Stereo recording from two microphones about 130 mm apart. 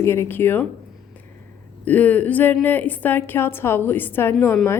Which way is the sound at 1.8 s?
10° left (ahead or behind).